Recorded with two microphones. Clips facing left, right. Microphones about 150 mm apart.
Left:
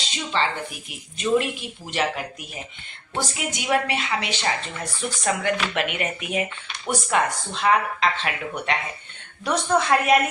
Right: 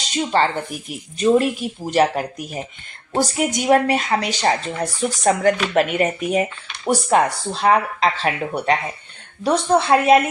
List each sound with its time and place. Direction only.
0.2 s a woman's voice: 45° right (ahead or behind)